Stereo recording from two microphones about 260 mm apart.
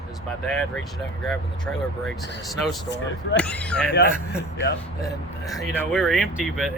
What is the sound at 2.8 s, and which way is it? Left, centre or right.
Speech, left.